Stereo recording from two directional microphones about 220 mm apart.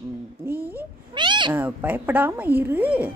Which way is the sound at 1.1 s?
20° right (ahead or behind).